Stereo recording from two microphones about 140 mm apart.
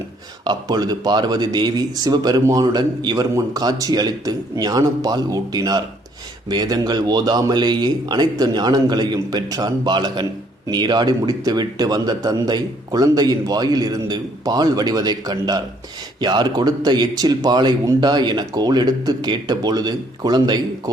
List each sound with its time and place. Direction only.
0.4 s speech: 30° right (ahead or behind)